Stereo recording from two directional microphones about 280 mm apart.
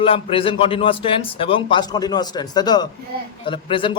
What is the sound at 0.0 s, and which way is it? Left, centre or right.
A man's voice, centre.